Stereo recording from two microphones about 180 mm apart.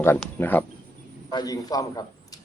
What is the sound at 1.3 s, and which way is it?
Speech, 20° left (ahead or behind).